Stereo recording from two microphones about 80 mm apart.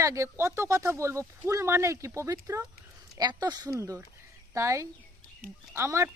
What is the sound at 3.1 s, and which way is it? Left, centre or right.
Speech, right.